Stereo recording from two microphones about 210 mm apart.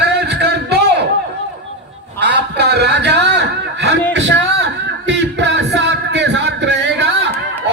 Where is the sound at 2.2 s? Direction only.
55° right (ahead or behind).